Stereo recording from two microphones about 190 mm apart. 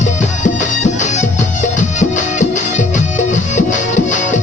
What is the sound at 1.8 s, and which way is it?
Music, 40° left (ahead or behind).